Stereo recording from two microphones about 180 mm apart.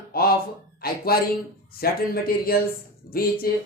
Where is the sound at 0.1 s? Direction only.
60° left (ahead or behind).